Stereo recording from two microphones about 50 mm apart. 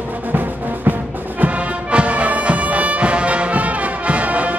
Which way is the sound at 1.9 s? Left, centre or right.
Right.